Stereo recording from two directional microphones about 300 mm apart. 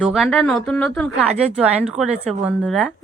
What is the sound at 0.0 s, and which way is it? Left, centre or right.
Speech, centre.